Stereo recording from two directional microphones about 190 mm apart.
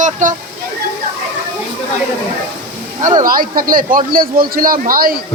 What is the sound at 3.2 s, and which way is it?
A man's voice, 50° right (ahead or behind).